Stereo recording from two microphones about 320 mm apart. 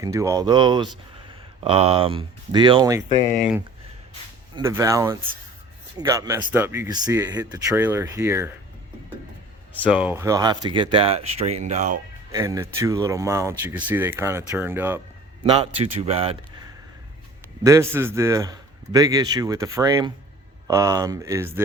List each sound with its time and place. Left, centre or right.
0.0 s speech: centre
4.5 s speech: centre
9.7 s speech: centre; by 11.9 s right
12.3 s speech: centre
17.6 s speech: centre